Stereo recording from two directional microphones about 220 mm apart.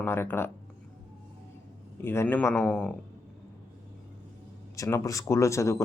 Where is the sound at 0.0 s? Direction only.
10° left (ahead or behind).